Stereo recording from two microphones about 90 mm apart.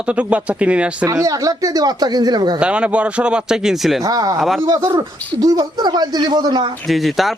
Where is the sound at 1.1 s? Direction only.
40° right (ahead or behind).